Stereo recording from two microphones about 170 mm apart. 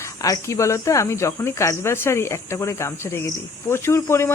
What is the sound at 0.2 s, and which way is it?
Speech, 20° left (ahead or behind).